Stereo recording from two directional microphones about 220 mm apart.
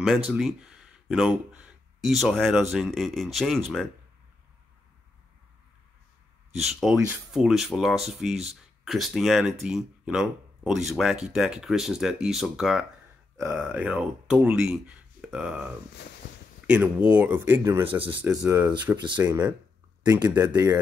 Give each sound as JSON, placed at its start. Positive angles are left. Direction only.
{"t": 0.3, "sound": "speech", "side_deg": 0}
{"t": 6.6, "sound": "speech", "side_deg": 0}